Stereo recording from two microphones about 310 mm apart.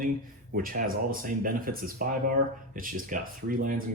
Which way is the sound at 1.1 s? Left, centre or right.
Right.